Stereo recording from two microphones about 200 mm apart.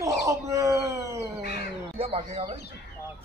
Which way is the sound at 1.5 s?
30° right (ahead or behind).